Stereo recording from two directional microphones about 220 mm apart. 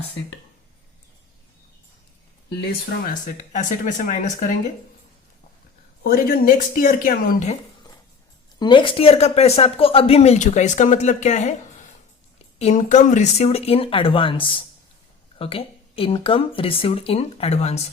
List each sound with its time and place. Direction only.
2.6 s speech: 40° left (ahead or behind)
6.0 s speech: 40° left (ahead or behind)
8.5 s speech: 20° left (ahead or behind)